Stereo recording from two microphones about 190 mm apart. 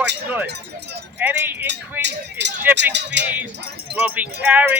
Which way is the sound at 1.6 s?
65° right (ahead or behind).